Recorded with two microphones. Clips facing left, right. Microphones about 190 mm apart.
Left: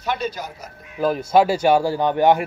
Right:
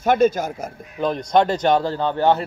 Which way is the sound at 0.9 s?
5° left (ahead or behind).